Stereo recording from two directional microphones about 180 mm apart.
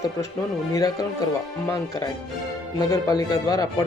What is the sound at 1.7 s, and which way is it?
A man's voice, 15° left (ahead or behind).